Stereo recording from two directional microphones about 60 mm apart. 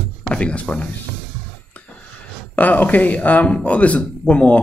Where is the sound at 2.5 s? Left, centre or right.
Left.